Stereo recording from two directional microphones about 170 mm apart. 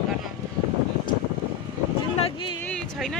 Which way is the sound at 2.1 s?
30° left (ahead or behind).